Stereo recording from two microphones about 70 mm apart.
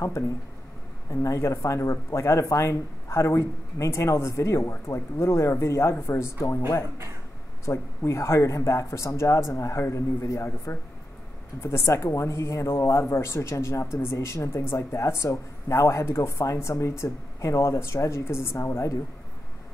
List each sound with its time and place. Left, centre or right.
1.1 s speech: left
7.6 s speech: left